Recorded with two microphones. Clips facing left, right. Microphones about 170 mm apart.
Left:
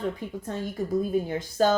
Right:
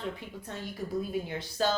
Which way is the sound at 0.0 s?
45° left (ahead or behind).